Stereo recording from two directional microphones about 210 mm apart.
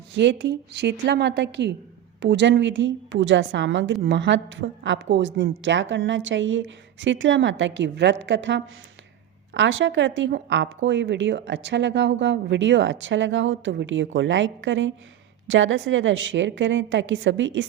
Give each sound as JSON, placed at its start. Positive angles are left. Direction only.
{"t": 0.1, "sound": "speech", "side_deg": -55}